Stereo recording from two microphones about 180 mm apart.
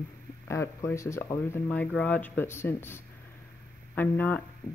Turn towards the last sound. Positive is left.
turn(degrees=10)  # may be behind; listen again after turning